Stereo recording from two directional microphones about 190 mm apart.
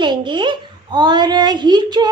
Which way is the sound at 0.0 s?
25° right (ahead or behind).